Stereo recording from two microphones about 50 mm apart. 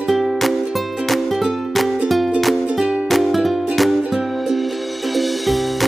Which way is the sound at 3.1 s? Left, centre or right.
Centre.